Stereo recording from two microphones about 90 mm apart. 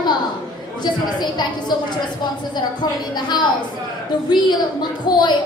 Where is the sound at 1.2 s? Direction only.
55° left (ahead or behind).